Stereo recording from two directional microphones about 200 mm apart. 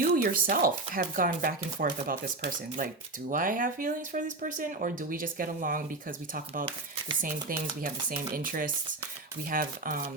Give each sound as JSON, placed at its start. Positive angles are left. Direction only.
{"t": 0.2, "sound": "speech", "side_deg": -45}